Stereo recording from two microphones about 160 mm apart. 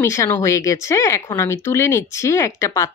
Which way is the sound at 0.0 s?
15° left (ahead or behind).